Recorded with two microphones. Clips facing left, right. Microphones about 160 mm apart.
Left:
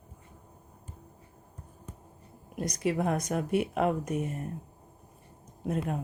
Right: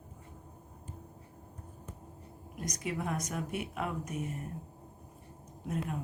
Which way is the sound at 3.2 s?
70° left (ahead or behind).